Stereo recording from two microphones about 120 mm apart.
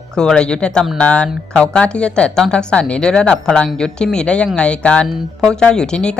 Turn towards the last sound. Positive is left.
turn(degrees=5)  # may be behind; listen again after turning